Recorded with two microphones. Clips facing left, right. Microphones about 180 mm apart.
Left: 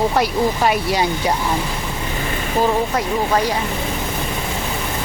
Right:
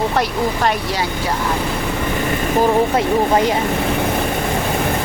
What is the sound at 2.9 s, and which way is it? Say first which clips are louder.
Speech: right 4 dB; 20° right (ahead or behind).